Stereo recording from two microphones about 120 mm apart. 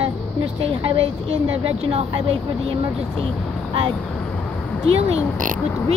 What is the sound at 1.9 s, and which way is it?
Speech, 50° right (ahead or behind).